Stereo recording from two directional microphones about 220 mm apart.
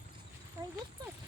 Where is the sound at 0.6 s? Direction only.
10° right (ahead or behind).